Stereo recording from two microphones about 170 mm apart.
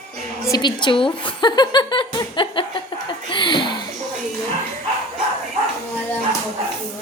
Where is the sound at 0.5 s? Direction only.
25° left (ahead or behind).